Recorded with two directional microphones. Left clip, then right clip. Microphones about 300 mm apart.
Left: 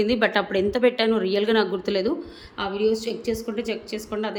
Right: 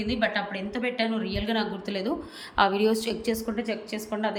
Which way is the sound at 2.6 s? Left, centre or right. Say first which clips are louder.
Right 1 dB; centre.